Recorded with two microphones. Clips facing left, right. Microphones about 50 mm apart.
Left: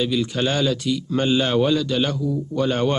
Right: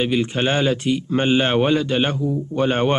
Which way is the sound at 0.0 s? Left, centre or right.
Right.